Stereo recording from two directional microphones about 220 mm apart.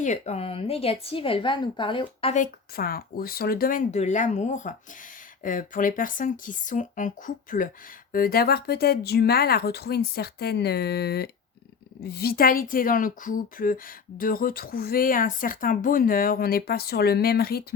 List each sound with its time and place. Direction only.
0.0 s speech: 30° left (ahead or behind)
2.3 s a woman's voice: 40° left (ahead or behind)